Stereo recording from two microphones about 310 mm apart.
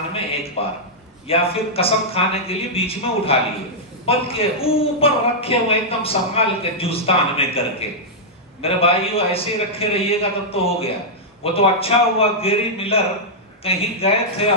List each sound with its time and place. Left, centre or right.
0.6 s speech: centre